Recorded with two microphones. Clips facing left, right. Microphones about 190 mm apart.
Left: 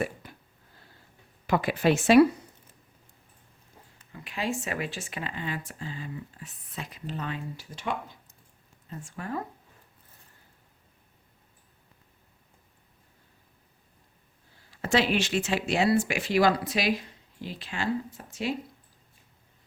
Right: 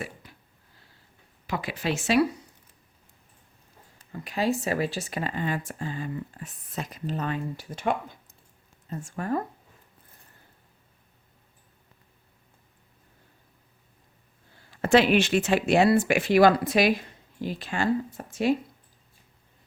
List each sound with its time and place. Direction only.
0.2 s a sound: 55° left (ahead or behind)
1.5 s speech: 55° left (ahead or behind)
3.9 s speech: 40° right (ahead or behind)
14.7 s speech: 55° right (ahead or behind)